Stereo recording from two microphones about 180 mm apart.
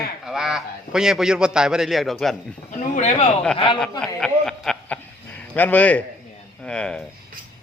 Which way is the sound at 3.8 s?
5° left (ahead or behind).